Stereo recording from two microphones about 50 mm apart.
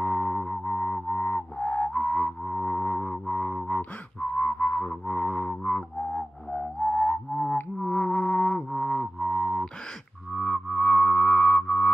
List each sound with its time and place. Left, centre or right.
0.0 s music: left
2.4 s music: left
6.9 s music: left
8.5 s music: centre
9.2 s a sound: centre
10.3 s music: centre; by 11.9 s left